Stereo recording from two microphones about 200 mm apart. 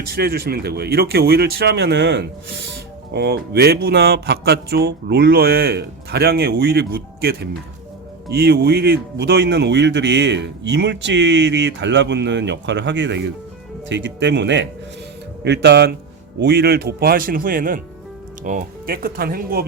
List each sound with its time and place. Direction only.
0.1 s speech: 50° right (ahead or behind)